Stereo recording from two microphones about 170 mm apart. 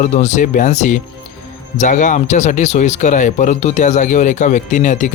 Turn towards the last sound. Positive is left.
turn(degrees=45)  # may be behind; listen again after turning